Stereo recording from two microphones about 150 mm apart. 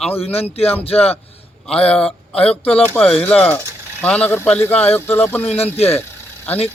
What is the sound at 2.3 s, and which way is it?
Speech, 40° left (ahead or behind).